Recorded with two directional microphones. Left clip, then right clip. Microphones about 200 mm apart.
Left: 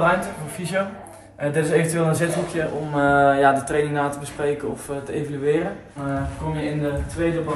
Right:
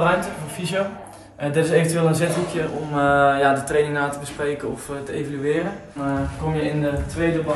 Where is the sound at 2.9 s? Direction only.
25° left (ahead or behind).